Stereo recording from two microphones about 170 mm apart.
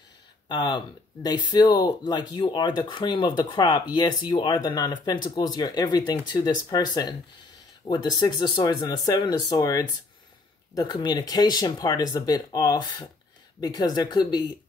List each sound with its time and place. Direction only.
0.5 s speech: 25° left (ahead or behind)